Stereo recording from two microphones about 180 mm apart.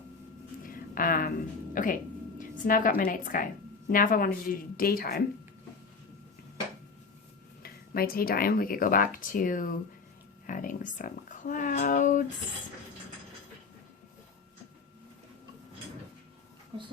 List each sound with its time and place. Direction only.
0.7 s a sound: 50° left (ahead or behind)
1.7 s speech: 50° left (ahead or behind)
2.4 s a sound: 50° left (ahead or behind)
3.0 s a woman's voice: 50° left (ahead or behind)
7.6 s a woman's voice: 55° left (ahead or behind)
16.7 s speech: 25° right (ahead or behind)